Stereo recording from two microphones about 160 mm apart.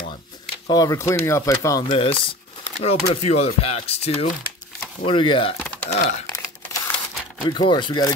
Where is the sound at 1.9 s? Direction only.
35° left (ahead or behind).